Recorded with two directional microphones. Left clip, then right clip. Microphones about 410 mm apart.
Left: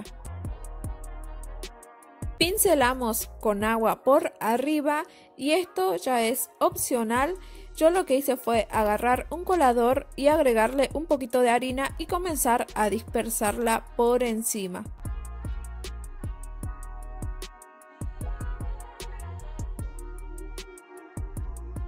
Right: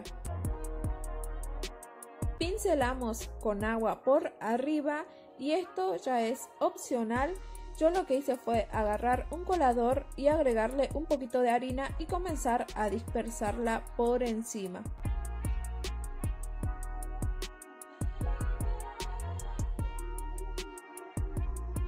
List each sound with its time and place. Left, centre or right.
0.0 s music: centre
2.3 s a woman's voice: centre
15.0 s music: centre
17.9 s music: centre
20.3 s music: centre